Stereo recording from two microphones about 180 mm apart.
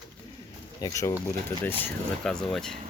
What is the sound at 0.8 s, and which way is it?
Speech, 20° left (ahead or behind).